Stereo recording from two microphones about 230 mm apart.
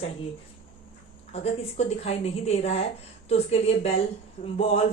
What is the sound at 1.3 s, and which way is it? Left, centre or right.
Speech, left.